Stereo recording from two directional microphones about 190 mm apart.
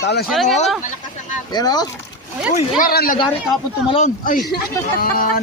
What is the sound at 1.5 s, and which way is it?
Speech, 20° left (ahead or behind).